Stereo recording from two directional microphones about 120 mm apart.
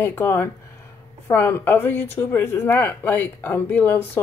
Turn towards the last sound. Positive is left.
turn(degrees=15)  # may be behind; listen again after turning